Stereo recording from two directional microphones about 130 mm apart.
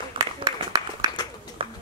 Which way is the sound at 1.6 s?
45° right (ahead or behind).